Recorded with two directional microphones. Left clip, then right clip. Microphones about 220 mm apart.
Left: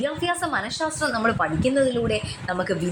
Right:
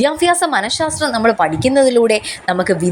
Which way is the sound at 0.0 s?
25° right (ahead or behind).